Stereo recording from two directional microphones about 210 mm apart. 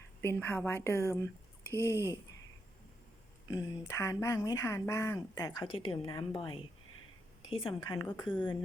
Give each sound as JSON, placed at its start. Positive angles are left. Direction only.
{"t": 0.2, "sound": "speech", "side_deg": 10}
{"t": 3.5, "sound": "a woman's voice", "side_deg": 15}